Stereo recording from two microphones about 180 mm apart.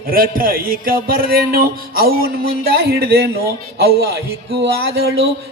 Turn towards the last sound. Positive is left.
turn(degrees=-60)  # may be behind; listen again after turning